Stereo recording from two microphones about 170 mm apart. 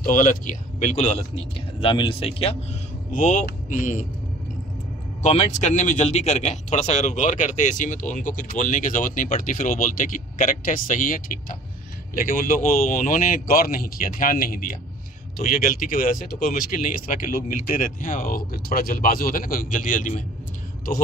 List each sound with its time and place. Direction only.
0.0 s a man's voice: 50° left (ahead or behind)
1.8 s speech: 30° left (ahead or behind)
3.1 s a man's voice: 45° left (ahead or behind)
5.2 s a man's voice: 40° left (ahead or behind)